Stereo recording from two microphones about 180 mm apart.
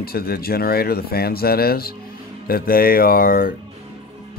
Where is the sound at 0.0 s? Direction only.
55° left (ahead or behind).